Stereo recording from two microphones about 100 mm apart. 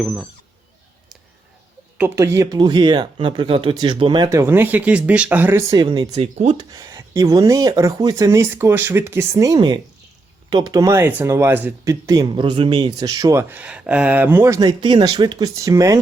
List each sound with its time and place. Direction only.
0.0 s speech: 5° left (ahead or behind)
2.1 s speech: 30° right (ahead or behind)
2.6 s speech: 50° right (ahead or behind); by 4.2 s 65° right (ahead or behind)
4.3 s speech: 25° right (ahead or behind)
5.7 s speech: 45° right (ahead or behind)
6.1 s speech: 90° right
6.6 s speech: 40° right (ahead or behind); by 11.7 s 25° right (ahead or behind)
11.9 s speech: 35° right (ahead or behind)
12.3 s speech: 55° right (ahead or behind)
13.1 s speech: 40° right (ahead or behind)
13.3 s speech: 20° right (ahead or behind)
14.6 s speech: 45° right (ahead or behind)